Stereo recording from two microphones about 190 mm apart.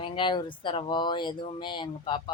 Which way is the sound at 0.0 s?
25° left (ahead or behind).